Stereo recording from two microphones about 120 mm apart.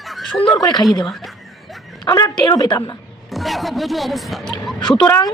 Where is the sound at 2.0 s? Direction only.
35° left (ahead or behind).